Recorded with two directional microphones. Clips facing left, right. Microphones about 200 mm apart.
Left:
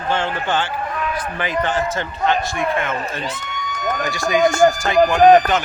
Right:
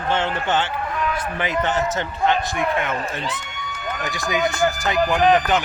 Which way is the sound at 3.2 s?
40° left (ahead or behind).